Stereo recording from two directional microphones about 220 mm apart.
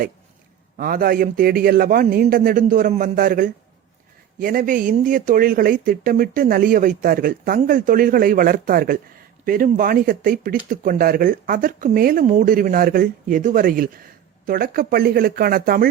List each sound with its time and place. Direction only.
0.8 s speech: 40° right (ahead or behind)